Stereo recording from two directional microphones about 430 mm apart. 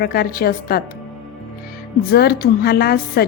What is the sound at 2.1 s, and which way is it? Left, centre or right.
Speech, left.